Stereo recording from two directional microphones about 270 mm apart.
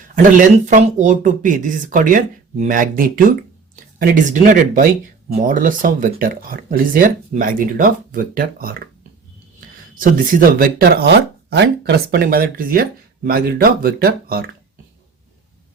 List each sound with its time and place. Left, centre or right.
0.2 s speech: right
10.6 s speech: right